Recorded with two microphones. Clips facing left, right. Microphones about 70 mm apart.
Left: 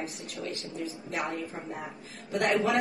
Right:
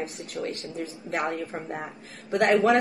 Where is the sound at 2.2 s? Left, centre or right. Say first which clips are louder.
Right 6 dB; right.